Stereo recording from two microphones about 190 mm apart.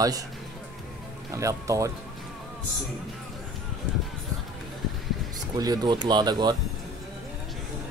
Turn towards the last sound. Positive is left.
turn(degrees=-20)  # may be behind; listen again after turning